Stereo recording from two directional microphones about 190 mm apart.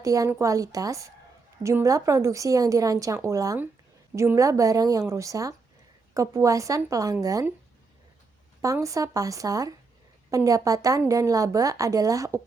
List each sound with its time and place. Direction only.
0.0 s a woman's voice: 15° right (ahead or behind)
8.6 s a woman's voice: 15° right (ahead or behind)